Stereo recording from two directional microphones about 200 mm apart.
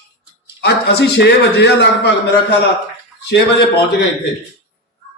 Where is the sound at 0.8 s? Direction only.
55° left (ahead or behind).